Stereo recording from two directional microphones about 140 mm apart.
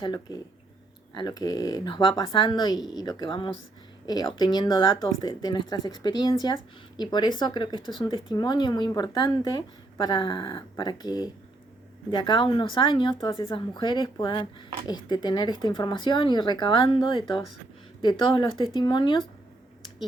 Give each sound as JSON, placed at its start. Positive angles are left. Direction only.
{"t": 0.0, "sound": "a woman's voice", "side_deg": 30}